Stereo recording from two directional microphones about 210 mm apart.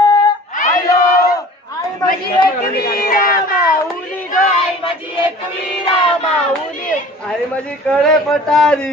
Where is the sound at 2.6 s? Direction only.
45° left (ahead or behind).